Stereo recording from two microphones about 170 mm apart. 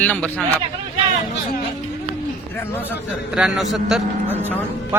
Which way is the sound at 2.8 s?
10° right (ahead or behind).